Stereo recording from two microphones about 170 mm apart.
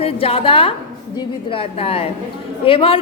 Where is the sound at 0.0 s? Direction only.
35° left (ahead or behind).